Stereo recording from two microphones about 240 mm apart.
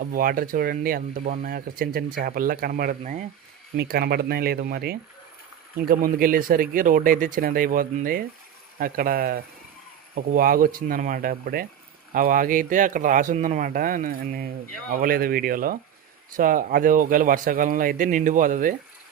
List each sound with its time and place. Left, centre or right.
0.0 s speech: right